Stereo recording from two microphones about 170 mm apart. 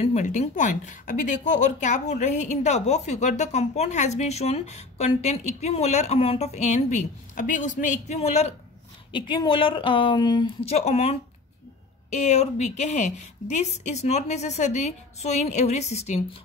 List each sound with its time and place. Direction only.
0.0 s a woman's voice: 45° left (ahead or behind)
9.1 s a woman's voice: 25° left (ahead or behind)